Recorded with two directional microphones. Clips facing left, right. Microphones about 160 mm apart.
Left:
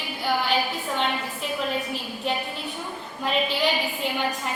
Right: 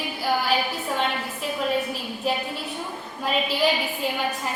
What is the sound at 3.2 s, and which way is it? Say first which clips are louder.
Speech: even; centre (ahead or behind).